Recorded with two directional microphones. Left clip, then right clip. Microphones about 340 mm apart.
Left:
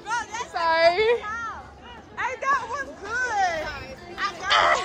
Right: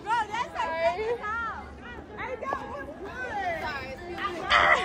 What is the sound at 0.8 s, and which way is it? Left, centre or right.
Whimper, left.